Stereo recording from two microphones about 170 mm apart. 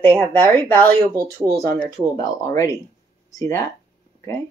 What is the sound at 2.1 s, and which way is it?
Speech, 20° left (ahead or behind).